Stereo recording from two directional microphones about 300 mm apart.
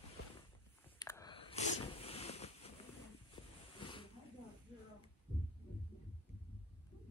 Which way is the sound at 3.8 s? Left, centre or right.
Centre.